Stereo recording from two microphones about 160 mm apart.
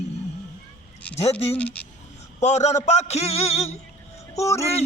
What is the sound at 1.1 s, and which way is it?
Speech, 40° left (ahead or behind).